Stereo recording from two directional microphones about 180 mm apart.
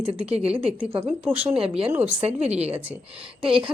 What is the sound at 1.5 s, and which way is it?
Speech, 30° right (ahead or behind).